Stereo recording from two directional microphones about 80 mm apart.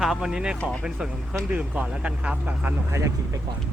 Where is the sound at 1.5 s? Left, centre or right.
Centre.